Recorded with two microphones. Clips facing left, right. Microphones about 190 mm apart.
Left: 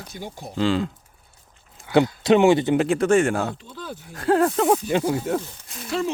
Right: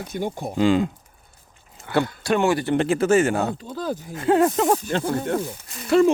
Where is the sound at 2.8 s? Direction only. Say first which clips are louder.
Even; centre (ahead or behind).